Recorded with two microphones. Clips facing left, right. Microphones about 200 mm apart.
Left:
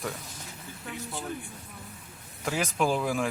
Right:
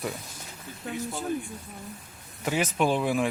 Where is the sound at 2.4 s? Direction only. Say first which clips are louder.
Right 2 dB; 5° right (ahead or behind).